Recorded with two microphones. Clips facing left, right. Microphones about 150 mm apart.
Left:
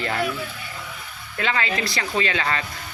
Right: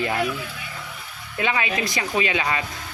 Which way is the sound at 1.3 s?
15° right (ahead or behind).